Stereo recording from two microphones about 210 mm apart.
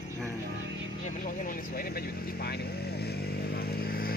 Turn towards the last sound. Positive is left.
turn(degrees=45)  # may be behind; listen again after turning